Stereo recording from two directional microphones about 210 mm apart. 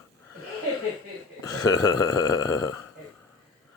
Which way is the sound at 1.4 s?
15° left (ahead or behind).